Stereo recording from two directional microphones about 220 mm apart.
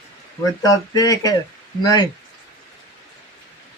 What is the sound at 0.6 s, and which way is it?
Speech, 15° left (ahead or behind).